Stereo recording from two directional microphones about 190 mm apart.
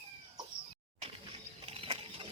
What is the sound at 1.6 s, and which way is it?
Mechanisms, 30° right (ahead or behind).